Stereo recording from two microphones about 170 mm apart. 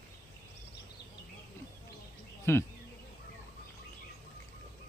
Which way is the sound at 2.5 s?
15° left (ahead or behind).